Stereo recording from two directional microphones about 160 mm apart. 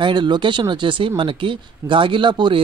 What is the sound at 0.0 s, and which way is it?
Speech, 30° right (ahead or behind).